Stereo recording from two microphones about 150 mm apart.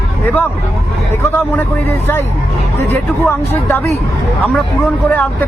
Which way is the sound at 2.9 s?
15° left (ahead or behind).